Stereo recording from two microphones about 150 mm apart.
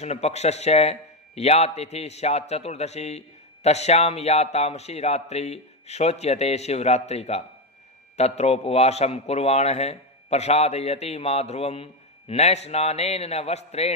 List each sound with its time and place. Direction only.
0.0 s a man's voice: 45° left (ahead or behind)